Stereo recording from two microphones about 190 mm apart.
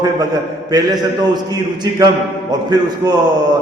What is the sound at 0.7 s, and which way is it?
A man's voice, 20° right (ahead or behind).